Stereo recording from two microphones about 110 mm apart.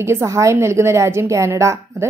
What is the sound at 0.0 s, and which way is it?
A woman's voice, 25° right (ahead or behind).